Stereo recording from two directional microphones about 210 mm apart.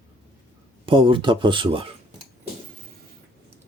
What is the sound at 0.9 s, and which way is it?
Speech, 25° right (ahead or behind).